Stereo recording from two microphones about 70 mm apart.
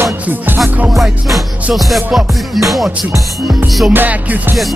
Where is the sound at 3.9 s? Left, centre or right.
Right.